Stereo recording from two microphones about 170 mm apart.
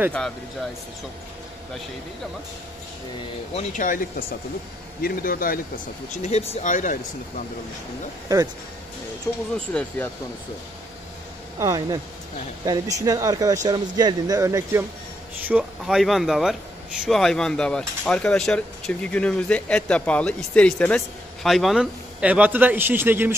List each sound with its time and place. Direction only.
3.5 s a man's voice: 50° left (ahead or behind)
6.1 s speech: 40° left (ahead or behind)
9.3 s speech: 15° left (ahead or behind)
11.6 s speech: 20° right (ahead or behind)
15.4 s a man's voice: 5° right (ahead or behind)